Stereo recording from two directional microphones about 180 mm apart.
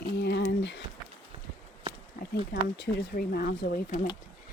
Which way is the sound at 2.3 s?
60° left (ahead or behind).